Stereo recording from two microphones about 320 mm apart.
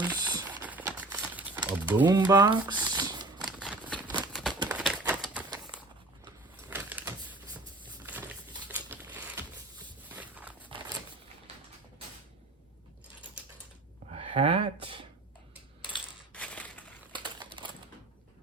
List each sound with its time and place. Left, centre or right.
0.0 s crumpling: centre
3.4 s shuffling cards: centre
4.3 s crumpling: centre
4.6 s typewriter: centre
6.2 s a sound: centre
8.7 s a sound: centre
9.8 s walk: centre
14.1 s a sound: centre
16.3 s crushing: centre
17.1 s typewriter: centre